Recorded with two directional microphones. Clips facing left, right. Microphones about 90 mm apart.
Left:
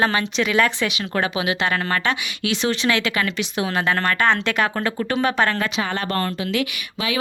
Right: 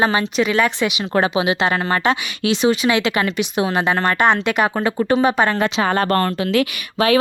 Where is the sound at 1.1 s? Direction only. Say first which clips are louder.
Right 5 dB; 25° right (ahead or behind).